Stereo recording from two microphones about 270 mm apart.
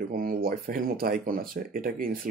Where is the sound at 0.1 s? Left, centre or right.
Right.